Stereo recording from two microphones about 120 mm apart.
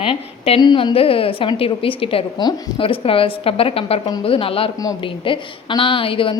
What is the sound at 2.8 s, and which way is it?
A woman's voice, 50° left (ahead or behind).